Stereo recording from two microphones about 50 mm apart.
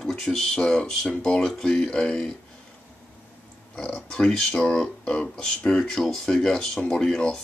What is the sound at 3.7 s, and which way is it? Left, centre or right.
Speech, centre.